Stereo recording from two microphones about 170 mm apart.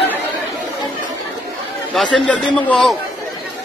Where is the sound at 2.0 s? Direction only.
5° left (ahead or behind).